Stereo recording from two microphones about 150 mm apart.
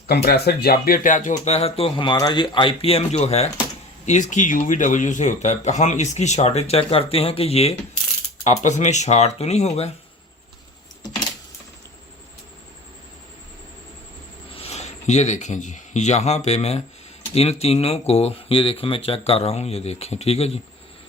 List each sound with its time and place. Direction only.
0.1 s speech: 90° left; by 9.9 s 45° left (ahead or behind)
14.5 s speech: 45° left (ahead or behind)